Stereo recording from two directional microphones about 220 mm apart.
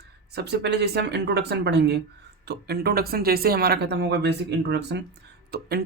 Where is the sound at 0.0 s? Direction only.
50° right (ahead or behind).